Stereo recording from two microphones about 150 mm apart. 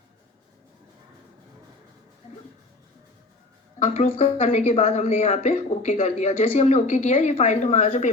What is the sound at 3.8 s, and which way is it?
Speech, 45° left (ahead or behind).